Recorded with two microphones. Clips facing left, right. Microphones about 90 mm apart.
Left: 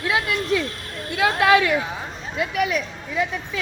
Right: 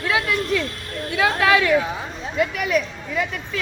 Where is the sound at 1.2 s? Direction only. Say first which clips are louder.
Left 1 dB; 20° left (ahead or behind).